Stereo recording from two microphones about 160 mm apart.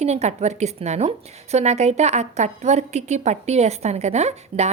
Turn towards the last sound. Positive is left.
turn(degrees=-45)  # may be behind; listen again after turning